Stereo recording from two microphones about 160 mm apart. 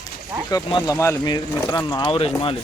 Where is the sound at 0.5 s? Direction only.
25° left (ahead or behind).